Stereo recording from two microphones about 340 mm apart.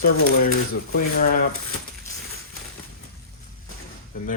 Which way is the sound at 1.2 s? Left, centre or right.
Left.